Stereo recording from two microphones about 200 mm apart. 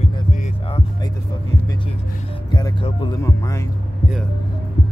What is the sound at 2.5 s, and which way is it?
Music, 25° left (ahead or behind).